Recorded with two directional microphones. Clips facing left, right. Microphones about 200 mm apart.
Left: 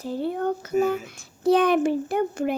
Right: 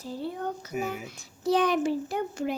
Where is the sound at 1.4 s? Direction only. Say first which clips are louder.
Left 5 dB; 55° left (ahead or behind).